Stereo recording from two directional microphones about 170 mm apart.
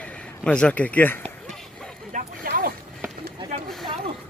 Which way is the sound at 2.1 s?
50° right (ahead or behind).